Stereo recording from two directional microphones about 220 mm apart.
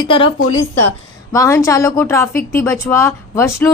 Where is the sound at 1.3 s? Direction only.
15° left (ahead or behind).